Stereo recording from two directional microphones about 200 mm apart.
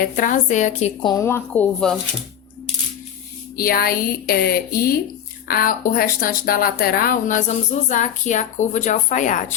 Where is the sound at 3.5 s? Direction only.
50° left (ahead or behind).